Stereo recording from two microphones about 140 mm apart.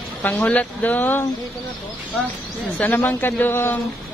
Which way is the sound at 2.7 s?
10° left (ahead or behind).